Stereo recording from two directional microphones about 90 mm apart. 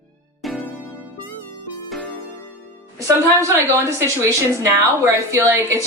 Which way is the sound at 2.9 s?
35° right (ahead or behind).